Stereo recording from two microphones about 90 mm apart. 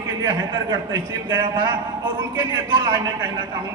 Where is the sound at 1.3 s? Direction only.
60° right (ahead or behind).